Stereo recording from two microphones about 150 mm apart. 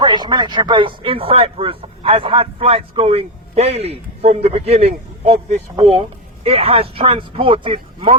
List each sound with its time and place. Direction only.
0.0 s speech: 30° right (ahead or behind)